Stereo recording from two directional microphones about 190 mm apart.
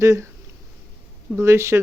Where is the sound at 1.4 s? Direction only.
15° right (ahead or behind).